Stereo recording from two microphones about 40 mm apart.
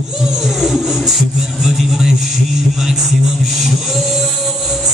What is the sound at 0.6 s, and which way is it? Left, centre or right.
Music, centre.